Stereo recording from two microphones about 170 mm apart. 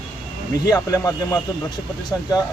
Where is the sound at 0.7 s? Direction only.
20° left (ahead or behind).